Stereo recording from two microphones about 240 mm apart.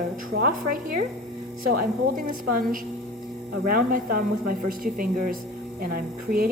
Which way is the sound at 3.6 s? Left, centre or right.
Right.